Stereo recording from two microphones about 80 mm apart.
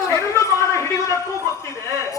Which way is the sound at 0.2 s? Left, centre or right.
Left.